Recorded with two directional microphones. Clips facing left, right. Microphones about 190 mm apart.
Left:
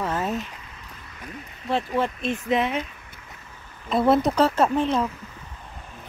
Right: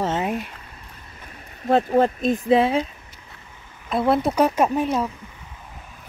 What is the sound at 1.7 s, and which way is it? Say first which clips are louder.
Speech: right 7 dB; 40° right (ahead or behind).